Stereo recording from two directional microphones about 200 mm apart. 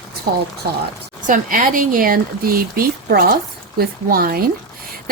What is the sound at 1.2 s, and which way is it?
A woman's voice, 40° right (ahead or behind).